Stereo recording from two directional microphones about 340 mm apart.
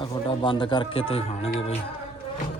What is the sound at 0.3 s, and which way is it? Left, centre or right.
Speech, centre.